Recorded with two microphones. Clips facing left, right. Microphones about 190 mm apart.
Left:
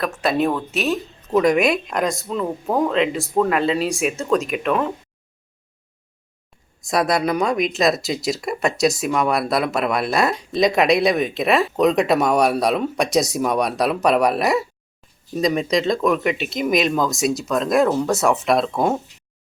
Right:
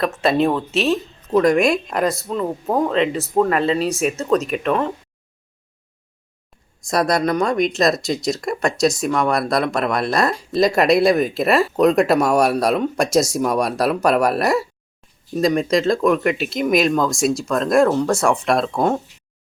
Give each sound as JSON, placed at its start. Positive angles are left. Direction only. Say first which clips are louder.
{"t": 0.0, "sound": "speech", "louder": "right 3 dB", "side_deg": 0}
{"t": 0.5, "sound": "speech", "louder": "right 3 dB", "side_deg": -30}
{"t": 1.3, "sound": "speech", "louder": "right 1 dB", "side_deg": 0}
{"t": 6.8, "sound": "speech", "louder": "right 1 dB", "side_deg": 0}